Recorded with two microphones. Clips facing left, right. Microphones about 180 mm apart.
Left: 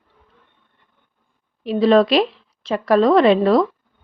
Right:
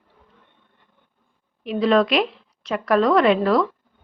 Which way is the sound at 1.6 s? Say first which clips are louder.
Left 4 dB; 35° left (ahead or behind).